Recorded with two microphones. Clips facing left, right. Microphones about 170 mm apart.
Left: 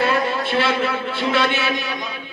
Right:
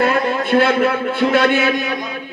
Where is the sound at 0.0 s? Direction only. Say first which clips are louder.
Right 3 dB; 50° right (ahead or behind).